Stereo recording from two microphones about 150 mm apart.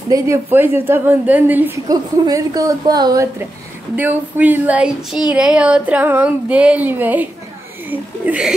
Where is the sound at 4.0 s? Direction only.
10° right (ahead or behind).